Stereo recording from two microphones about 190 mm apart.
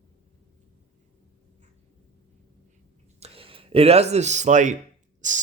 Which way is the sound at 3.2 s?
30° right (ahead or behind).